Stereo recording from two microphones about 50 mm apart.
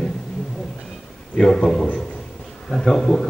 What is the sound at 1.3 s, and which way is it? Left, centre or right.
Speech, centre.